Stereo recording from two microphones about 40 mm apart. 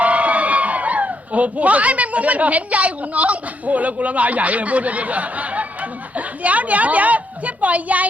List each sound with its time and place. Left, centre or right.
0.0 s speech: right